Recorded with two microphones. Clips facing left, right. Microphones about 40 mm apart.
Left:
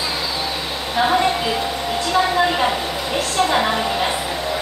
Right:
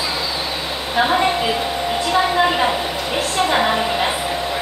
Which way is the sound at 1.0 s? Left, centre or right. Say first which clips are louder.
Right 1 dB; centre.